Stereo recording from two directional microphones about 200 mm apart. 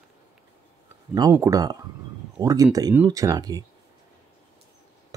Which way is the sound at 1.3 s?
15° right (ahead or behind).